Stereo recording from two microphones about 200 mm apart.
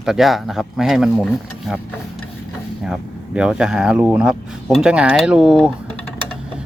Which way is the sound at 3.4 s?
5° right (ahead or behind).